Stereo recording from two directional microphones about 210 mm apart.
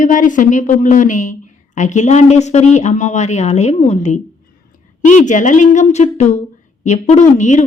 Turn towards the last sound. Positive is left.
turn(degrees=35)  # may be behind; listen again after turning